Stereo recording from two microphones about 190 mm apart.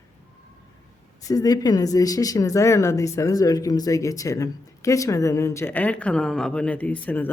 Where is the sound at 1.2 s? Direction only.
20° left (ahead or behind).